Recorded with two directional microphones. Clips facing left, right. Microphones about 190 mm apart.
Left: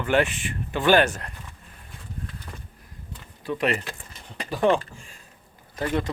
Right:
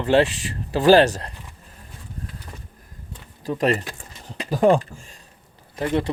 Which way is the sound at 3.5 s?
40° right (ahead or behind).